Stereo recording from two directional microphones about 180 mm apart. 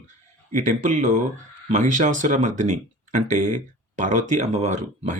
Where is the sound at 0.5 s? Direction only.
45° right (ahead or behind).